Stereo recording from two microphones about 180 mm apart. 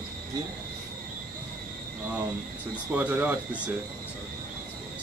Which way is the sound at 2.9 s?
10° right (ahead or behind).